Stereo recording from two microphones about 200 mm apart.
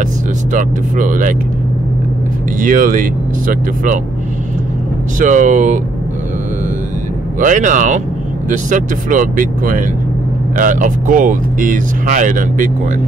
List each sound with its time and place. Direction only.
0.5 s speech: 40° right (ahead or behind)
2.6 s speech: 40° right (ahead or behind)
5.2 s speech: 40° right (ahead or behind)
7.3 s speech: 40° right (ahead or behind)